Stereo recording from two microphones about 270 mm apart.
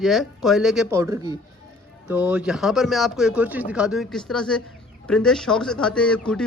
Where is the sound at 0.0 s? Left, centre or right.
Centre.